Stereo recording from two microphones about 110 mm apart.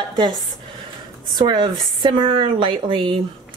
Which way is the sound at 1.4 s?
45° right (ahead or behind).